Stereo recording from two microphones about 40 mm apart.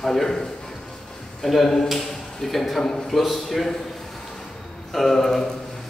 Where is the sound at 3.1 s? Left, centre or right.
Centre.